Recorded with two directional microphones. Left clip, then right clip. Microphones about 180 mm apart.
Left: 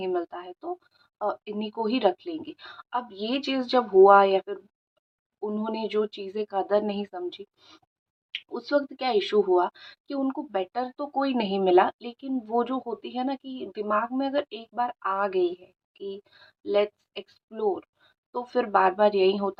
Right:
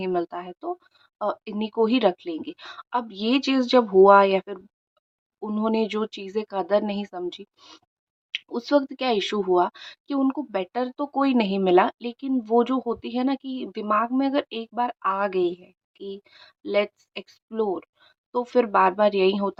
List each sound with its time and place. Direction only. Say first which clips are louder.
0.0 s speech: right 3 dB; 35° right (ahead or behind)